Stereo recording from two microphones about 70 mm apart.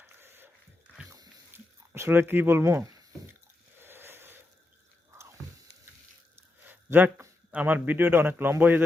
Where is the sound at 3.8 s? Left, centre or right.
Right.